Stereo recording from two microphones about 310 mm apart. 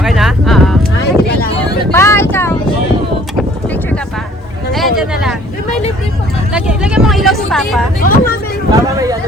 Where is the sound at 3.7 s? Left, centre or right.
Centre.